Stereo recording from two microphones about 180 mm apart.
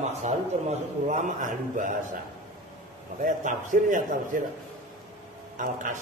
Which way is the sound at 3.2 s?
45° right (ahead or behind).